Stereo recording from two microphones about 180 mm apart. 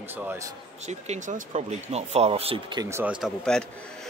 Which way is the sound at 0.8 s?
40° right (ahead or behind).